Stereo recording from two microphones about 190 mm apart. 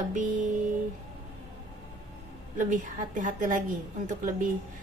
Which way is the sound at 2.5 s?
40° right (ahead or behind).